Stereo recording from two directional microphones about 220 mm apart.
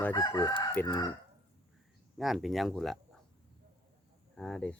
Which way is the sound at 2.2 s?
Centre (ahead or behind).